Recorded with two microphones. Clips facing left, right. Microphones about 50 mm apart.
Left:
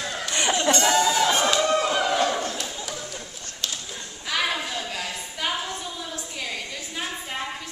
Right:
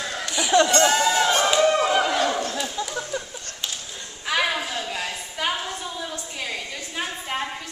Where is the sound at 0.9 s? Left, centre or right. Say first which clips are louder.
Even; right.